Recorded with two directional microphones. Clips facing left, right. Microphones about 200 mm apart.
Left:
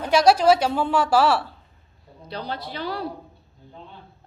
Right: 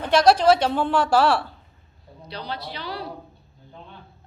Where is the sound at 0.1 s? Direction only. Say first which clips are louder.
Even; 10° left (ahead or behind).